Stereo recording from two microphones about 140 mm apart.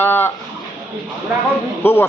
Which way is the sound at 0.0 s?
15° left (ahead or behind).